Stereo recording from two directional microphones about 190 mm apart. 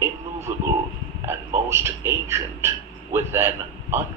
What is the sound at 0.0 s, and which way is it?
Radio, 15° right (ahead or behind).